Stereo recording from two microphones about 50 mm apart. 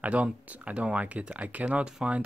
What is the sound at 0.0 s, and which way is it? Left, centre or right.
Speech, right.